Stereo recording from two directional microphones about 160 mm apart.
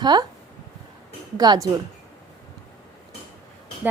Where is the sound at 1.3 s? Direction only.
25° right (ahead or behind).